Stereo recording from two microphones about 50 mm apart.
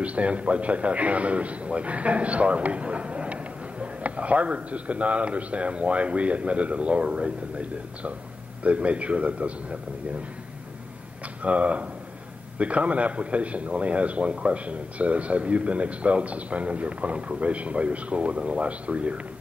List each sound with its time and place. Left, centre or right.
0.0 s a man's voice: right
11.4 s a man's voice: right